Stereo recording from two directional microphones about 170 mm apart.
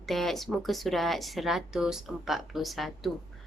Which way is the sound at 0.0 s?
Centre (ahead or behind).